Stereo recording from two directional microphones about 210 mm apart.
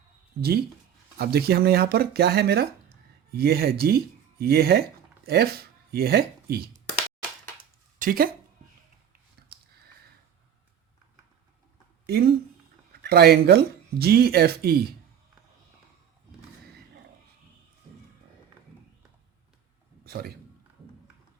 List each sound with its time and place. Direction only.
1.2 s speech: 50° right (ahead or behind)
7.9 s speech: 40° right (ahead or behind)
12.0 s speech: 50° right (ahead or behind)
20.1 s a man's voice: 45° right (ahead or behind)